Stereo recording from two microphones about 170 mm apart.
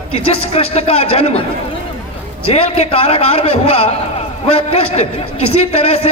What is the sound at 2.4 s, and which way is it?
A man's voice, 35° left (ahead or behind).